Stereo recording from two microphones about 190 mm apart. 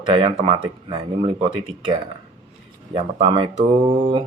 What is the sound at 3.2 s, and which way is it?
Speech, 25° right (ahead or behind).